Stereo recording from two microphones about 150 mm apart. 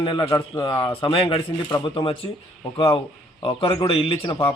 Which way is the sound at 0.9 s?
35° left (ahead or behind).